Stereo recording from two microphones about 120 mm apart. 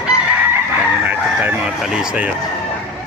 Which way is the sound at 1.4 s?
10° right (ahead or behind).